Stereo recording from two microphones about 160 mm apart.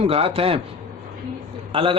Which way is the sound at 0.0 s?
35° right (ahead or behind).